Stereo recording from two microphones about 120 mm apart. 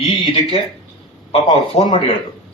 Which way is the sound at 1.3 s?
55° left (ahead or behind).